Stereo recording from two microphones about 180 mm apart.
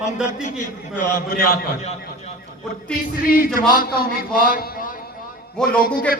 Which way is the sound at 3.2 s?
50° left (ahead or behind).